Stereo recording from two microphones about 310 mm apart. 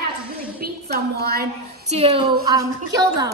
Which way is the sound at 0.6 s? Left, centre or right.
Right.